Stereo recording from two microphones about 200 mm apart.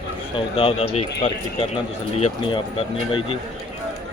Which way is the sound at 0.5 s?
30° left (ahead or behind).